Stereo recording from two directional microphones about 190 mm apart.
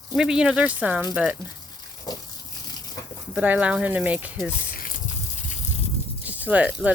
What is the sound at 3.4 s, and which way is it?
Speech, 5° right (ahead or behind).